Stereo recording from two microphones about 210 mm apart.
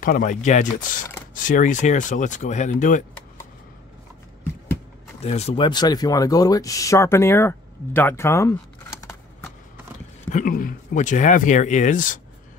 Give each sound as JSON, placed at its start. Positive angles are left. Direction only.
{"t": 0.0, "sound": "speech", "side_deg": 40}
{"t": 5.2, "sound": "speech", "side_deg": 30}
{"t": 10.3, "sound": "speech", "side_deg": 40}